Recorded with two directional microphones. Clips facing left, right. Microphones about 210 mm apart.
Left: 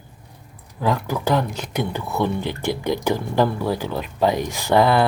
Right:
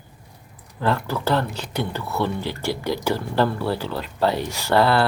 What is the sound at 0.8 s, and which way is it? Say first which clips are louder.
Speech: left 1 dB; 15° left (ahead or behind).